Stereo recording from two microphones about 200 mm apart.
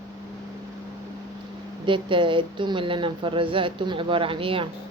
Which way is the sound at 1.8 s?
25° right (ahead or behind).